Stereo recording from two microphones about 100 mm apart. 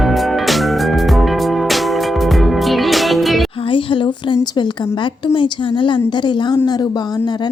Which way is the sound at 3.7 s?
60° left (ahead or behind).